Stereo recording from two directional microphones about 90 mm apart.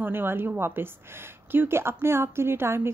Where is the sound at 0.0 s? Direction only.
25° right (ahead or behind).